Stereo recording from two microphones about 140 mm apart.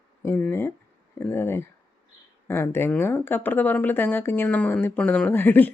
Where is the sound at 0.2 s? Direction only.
15° left (ahead or behind).